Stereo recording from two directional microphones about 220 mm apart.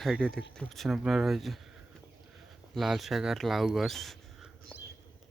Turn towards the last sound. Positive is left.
turn(degrees=0)  # may be behind; listen again after turning